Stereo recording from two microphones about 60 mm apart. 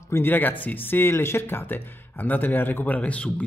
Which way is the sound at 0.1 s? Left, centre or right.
Left.